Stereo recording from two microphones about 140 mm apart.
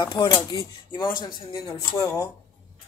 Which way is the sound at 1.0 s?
30° left (ahead or behind).